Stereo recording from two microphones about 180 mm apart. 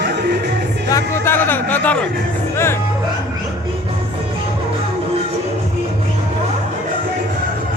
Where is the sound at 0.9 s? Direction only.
15° left (ahead or behind).